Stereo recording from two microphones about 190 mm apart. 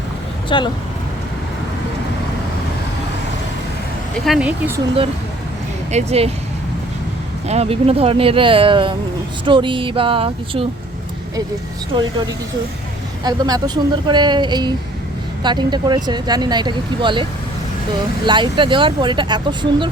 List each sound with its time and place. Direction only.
0.4 s speech: 25° left (ahead or behind)
4.3 s speech: 5° right (ahead or behind)
5.9 s speech: 35° right (ahead or behind)
7.4 s speech: 35° right (ahead or behind)
13.2 s speech: 20° right (ahead or behind)
18.3 s speech: 25° right (ahead or behind)